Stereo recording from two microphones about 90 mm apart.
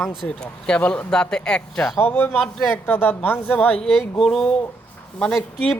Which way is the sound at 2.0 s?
25° left (ahead or behind).